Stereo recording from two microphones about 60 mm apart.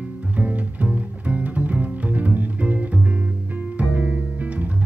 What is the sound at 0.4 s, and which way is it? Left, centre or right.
Music, right.